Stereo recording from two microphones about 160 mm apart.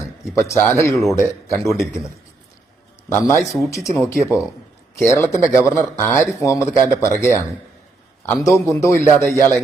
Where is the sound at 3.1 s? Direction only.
20° left (ahead or behind).